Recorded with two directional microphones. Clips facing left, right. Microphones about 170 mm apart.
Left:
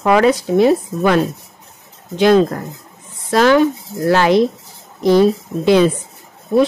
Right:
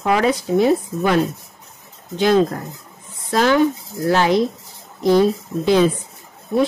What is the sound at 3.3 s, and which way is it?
Speech, 80° left.